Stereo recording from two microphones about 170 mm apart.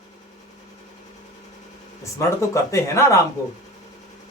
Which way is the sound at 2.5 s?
20° left (ahead or behind).